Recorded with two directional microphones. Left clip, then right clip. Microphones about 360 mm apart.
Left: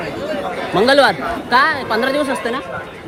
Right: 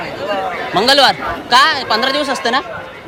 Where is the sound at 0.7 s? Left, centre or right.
Centre.